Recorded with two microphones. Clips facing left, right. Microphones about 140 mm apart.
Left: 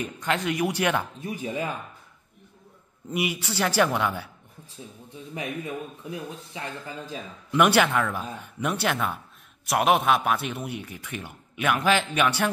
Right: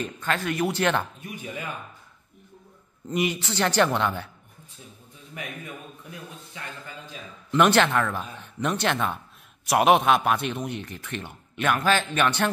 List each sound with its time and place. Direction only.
0.0 s speech: 15° left (ahead or behind)
1.2 s speech: 30° left (ahead or behind)
3.1 s speech: 10° left (ahead or behind)
6.0 s speech: 30° left (ahead or behind)
7.5 s speech: 10° left (ahead or behind)